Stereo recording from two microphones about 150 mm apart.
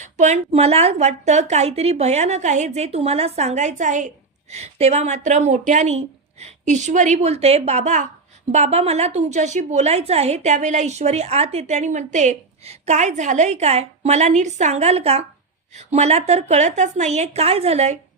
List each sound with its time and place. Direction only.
0.0 s a woman's voice: 50° right (ahead or behind)